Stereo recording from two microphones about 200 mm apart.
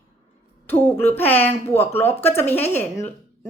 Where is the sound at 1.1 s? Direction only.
10° left (ahead or behind).